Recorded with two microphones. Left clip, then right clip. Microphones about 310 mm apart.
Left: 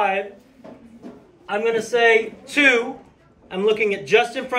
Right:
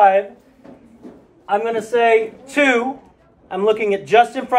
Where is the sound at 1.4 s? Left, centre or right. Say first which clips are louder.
Right 2 dB; centre.